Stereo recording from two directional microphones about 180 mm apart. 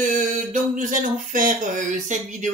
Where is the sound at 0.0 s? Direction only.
45° right (ahead or behind).